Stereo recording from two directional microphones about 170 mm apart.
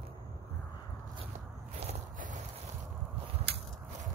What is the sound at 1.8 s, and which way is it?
Walk, 40° right (ahead or behind).